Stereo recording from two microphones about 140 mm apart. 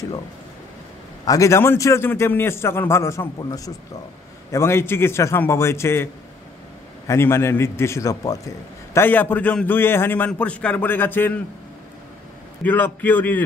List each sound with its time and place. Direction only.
1.2 s a man's voice: 25° left (ahead or behind)
7.1 s a man's voice: 20° left (ahead or behind)
12.6 s a man's voice: 15° left (ahead or behind)